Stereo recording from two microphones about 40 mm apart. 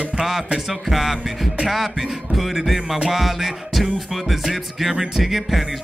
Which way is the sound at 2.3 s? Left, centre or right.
Centre.